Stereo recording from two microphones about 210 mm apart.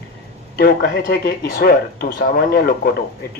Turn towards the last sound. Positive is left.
turn(degrees=45)  # may be behind; listen again after turning